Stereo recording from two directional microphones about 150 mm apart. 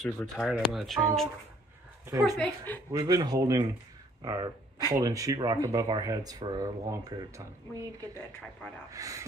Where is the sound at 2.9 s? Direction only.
25° right (ahead or behind).